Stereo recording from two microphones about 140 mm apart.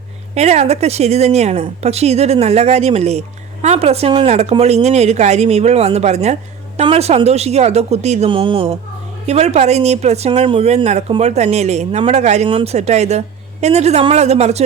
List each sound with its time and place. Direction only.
0.3 s speech: 50° right (ahead or behind)
8.3 s speech: 40° right (ahead or behind)